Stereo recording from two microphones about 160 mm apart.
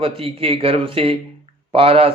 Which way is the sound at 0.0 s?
35° right (ahead or behind).